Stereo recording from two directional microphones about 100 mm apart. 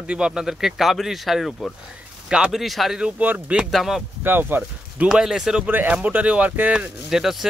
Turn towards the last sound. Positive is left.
turn(degrees=-5)  # may be behind; listen again after turning